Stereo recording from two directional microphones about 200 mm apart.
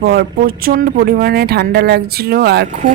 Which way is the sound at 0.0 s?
50° right (ahead or behind).